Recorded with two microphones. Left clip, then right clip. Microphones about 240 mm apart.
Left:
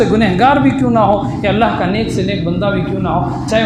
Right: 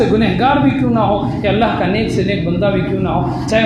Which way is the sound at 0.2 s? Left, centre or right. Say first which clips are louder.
Left 3 dB; left.